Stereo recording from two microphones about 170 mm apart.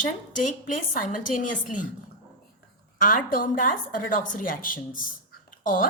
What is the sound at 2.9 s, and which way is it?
A woman's voice, 55° left (ahead or behind).